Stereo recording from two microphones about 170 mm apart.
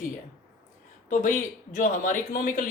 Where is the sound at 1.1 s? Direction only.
50° left (ahead or behind).